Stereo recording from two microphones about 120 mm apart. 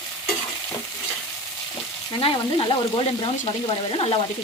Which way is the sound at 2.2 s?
45° left (ahead or behind).